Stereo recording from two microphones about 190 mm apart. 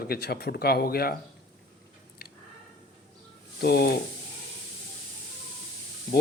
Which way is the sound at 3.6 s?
55° left (ahead or behind).